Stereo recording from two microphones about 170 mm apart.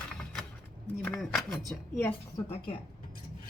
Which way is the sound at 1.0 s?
Centre (ahead or behind).